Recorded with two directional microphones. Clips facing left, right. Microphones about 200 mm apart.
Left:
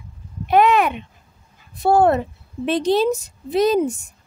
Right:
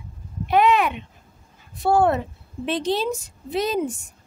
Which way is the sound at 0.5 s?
45° left (ahead or behind).